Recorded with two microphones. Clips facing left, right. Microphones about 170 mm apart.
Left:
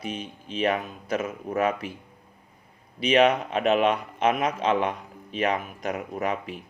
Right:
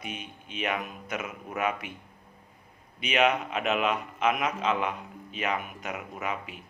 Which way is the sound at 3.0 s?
35° left (ahead or behind).